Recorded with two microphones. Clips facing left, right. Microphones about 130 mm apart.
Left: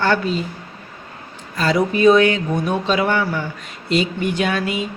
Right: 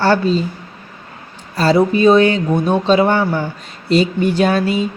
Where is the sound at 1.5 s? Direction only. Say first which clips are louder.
Right 5 dB; 30° right (ahead or behind).